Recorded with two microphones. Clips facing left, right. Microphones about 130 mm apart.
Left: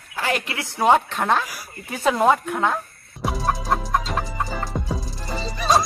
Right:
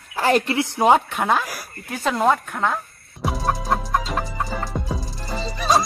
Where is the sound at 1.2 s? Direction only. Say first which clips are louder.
Even; 5° right (ahead or behind).